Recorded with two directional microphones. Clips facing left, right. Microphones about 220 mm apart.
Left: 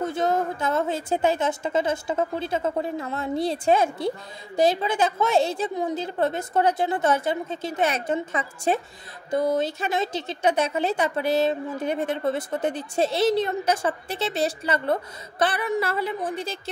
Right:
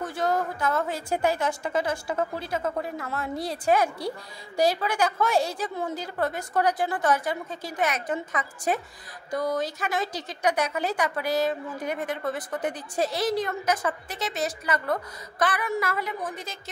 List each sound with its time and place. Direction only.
0.0 s speech: 20° left (ahead or behind)